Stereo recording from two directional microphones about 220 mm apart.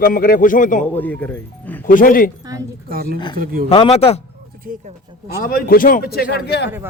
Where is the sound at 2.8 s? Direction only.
40° right (ahead or behind).